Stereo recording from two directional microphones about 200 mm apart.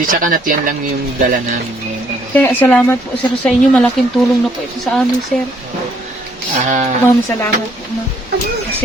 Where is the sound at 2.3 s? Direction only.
10° left (ahead or behind).